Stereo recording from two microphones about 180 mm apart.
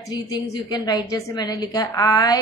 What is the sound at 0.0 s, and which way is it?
A woman's voice, 20° left (ahead or behind).